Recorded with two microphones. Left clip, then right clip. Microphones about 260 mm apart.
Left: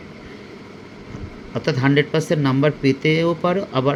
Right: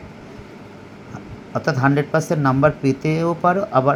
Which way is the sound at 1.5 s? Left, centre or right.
Centre.